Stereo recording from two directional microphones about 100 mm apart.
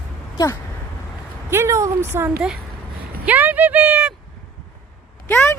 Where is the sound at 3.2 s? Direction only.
15° right (ahead or behind).